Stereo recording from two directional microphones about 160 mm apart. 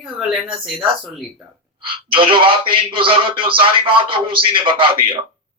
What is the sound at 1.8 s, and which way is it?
A man's voice, 30° right (ahead or behind).